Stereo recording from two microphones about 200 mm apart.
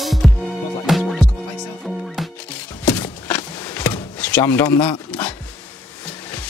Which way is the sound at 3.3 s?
10° left (ahead or behind).